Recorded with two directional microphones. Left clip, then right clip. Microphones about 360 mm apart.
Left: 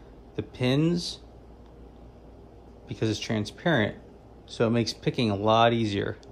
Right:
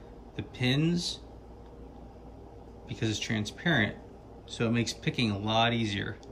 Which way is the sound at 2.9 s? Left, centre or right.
Centre.